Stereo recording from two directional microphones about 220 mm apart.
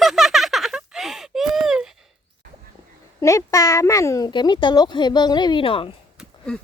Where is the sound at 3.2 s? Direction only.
15° left (ahead or behind).